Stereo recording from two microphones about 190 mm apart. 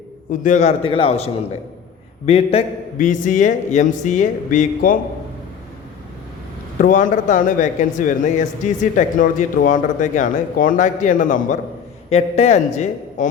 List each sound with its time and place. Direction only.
0.3 s speech: 40° left (ahead or behind)
6.7 s speech: 45° left (ahead or behind)